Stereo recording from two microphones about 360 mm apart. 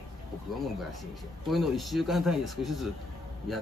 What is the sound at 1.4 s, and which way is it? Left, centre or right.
Speech, centre.